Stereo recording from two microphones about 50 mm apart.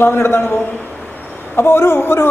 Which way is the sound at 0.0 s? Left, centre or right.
Left.